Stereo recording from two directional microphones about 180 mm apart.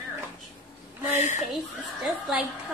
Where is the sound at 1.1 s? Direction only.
40° left (ahead or behind).